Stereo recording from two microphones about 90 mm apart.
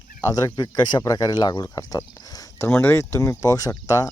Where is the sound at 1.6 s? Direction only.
40° left (ahead or behind).